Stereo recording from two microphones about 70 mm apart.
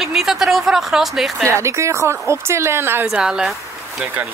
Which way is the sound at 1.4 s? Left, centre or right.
Right.